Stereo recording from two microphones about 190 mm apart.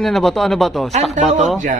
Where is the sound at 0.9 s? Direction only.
40° right (ahead or behind).